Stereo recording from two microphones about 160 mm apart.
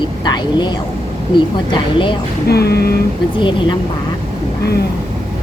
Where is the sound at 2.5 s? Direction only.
85° left.